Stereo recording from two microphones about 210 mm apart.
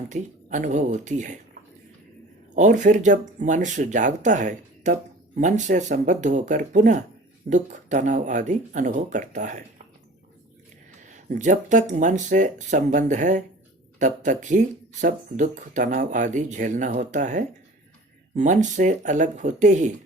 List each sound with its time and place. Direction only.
0.1 s speech: 35° right (ahead or behind)
2.6 s speech: 35° right (ahead or behind)
11.0 s speech: 35° right (ahead or behind)